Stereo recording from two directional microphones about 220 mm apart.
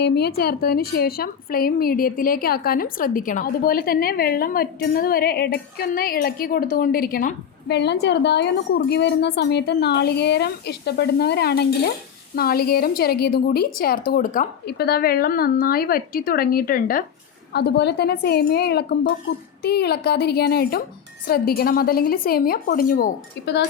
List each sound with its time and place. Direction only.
0.0 s a woman's voice: 45° left (ahead or behind)